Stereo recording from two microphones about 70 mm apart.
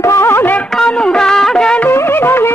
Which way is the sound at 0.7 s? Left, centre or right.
Centre.